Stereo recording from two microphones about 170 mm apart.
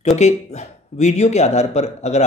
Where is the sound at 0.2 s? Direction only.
40° left (ahead or behind).